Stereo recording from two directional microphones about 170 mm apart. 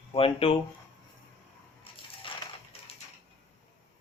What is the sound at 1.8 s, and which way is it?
Crushing, 30° left (ahead or behind).